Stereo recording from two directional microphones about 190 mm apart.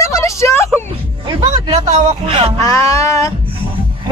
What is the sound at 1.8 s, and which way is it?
Speech, 35° right (ahead or behind).